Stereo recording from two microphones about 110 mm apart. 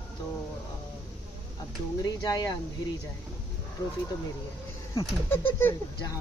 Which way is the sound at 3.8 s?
45° left (ahead or behind).